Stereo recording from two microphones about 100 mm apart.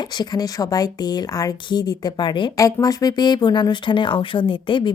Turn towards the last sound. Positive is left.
turn(degrees=55)  # may be behind; listen again after turning